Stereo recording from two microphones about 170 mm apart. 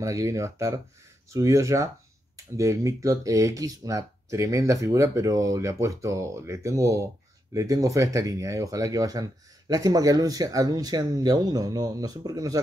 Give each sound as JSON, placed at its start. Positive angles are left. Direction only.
{"t": 0.0, "sound": "speech", "side_deg": -20}